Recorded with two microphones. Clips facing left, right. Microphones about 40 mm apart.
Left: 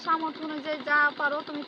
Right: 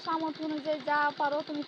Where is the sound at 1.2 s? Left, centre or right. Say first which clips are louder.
Left 2 dB; left.